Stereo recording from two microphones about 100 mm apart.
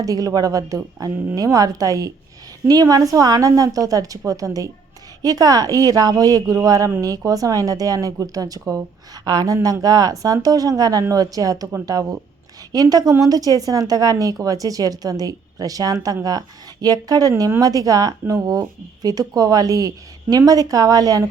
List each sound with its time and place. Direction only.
0.0 s speech: 35° right (ahead or behind)